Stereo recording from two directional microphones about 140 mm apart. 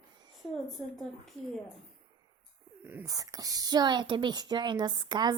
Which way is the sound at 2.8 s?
20° right (ahead or behind).